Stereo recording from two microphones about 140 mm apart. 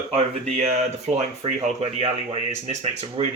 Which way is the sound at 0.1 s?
45° right (ahead or behind).